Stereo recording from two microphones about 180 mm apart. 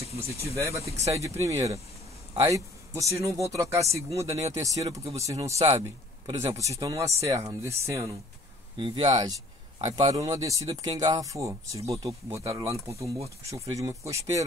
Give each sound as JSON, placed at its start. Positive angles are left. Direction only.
{"t": 0.1, "sound": "speech", "side_deg": 35}
{"t": 0.6, "sound": "speech", "side_deg": -15}
{"t": 8.7, "sound": "speech", "side_deg": -25}